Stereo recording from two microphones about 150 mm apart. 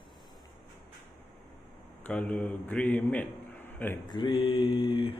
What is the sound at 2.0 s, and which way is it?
A man's voice, 10° left (ahead or behind).